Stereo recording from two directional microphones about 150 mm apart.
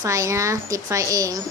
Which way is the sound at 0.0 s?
20° right (ahead or behind).